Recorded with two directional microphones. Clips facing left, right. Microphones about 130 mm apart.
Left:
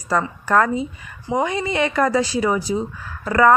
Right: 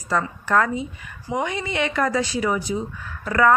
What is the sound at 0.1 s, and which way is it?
Speech, 40° left (ahead or behind).